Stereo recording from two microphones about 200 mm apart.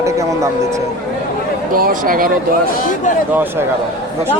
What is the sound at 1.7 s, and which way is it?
Speech, 45° right (ahead or behind).